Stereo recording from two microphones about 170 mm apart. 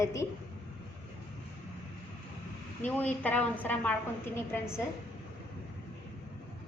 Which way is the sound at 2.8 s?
10° left (ahead or behind).